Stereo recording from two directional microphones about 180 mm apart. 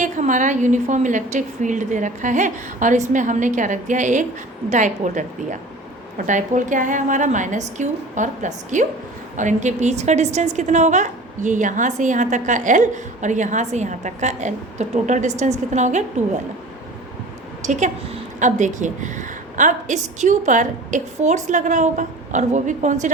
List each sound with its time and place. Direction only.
0.0 s a woman's voice: 45° right (ahead or behind)
17.6 s a woman's voice: 40° right (ahead or behind)